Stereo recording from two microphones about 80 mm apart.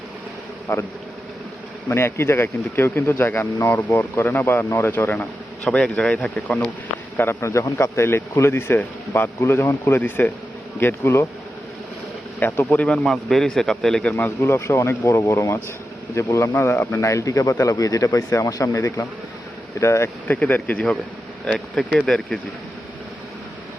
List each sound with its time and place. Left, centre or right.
0.7 s a man's voice: left
1.9 s speech: left
5.6 s a man's voice: centre
7.2 s a man's voice: left
10.0 s a man's voice: left
12.7 s a man's voice: centre
14.1 s a man's voice: left
17.0 s a man's voice: left
20.2 s a man's voice: centre